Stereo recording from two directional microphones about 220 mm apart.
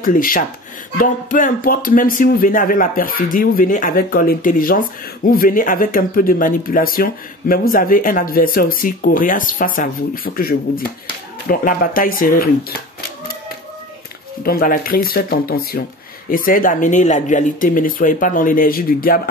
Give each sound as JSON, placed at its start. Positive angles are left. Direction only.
{"t": 0.0, "sound": "speech", "side_deg": 40}
{"t": 14.4, "sound": "speech", "side_deg": 40}